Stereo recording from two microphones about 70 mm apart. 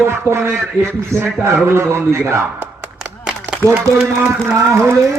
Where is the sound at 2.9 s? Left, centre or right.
Centre.